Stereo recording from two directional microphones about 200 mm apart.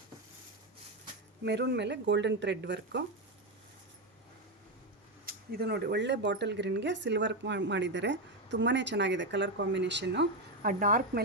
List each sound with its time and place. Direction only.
1.5 s speech: 60° right (ahead or behind)
5.2 s speech: 50° right (ahead or behind)